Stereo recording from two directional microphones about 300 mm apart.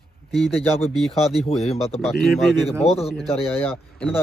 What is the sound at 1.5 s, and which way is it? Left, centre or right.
Speech, centre.